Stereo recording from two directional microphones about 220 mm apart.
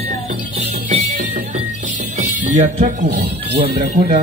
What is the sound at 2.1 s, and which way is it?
Speech, 30° right (ahead or behind).